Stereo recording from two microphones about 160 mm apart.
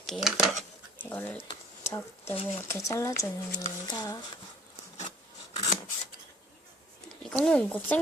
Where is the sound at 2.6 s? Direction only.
20° left (ahead or behind).